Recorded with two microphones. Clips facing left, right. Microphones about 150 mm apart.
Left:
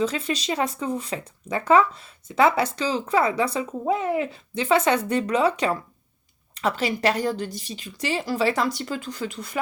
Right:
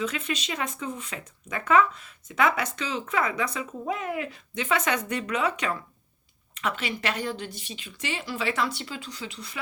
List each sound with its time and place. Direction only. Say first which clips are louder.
0.0 s speech: left 5 dB; 35° left (ahead or behind); by 9.6 s 50° left (ahead or behind)